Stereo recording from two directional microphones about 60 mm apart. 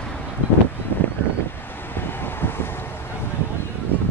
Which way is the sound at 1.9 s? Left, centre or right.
Left.